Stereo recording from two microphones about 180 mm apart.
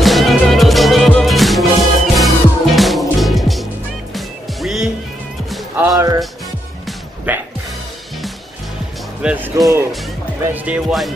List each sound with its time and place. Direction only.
0.0 s music: centre (ahead or behind)
5.8 s music: 20° right (ahead or behind)
7.3 s music: 10° right (ahead or behind)
9.2 s music: 5° right (ahead or behind)
10.5 s speech: 10° right (ahead or behind)